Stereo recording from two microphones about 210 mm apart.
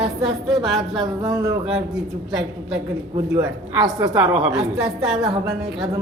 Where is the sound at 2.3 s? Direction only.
5° right (ahead or behind).